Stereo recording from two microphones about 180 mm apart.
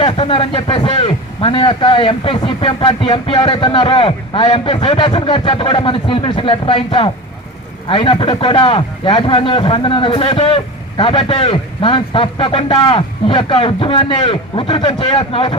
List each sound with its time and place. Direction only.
0.0 s a man's voice: 30° left (ahead or behind)